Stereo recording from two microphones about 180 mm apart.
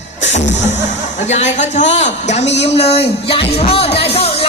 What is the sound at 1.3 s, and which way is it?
A man's voice, 40° left (ahead or behind).